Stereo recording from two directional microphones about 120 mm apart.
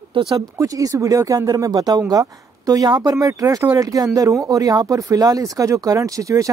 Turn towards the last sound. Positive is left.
turn(degrees=-30)  # may be behind; listen again after turning